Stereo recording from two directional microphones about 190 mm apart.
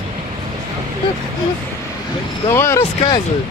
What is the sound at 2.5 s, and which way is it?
Speech, 15° left (ahead or behind).